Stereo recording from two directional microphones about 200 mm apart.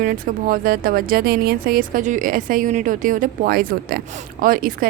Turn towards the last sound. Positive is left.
turn(degrees=-45)  # may be behind; listen again after turning